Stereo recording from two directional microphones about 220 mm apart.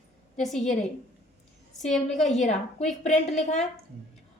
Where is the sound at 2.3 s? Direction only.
30° left (ahead or behind).